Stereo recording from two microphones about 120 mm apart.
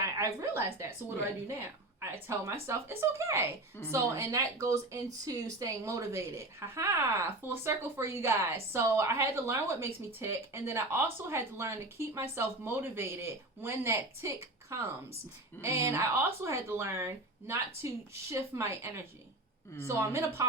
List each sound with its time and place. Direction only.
0.0 s speech: 25° right (ahead or behind)